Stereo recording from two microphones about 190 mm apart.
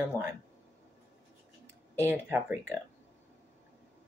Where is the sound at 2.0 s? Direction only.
10° right (ahead or behind).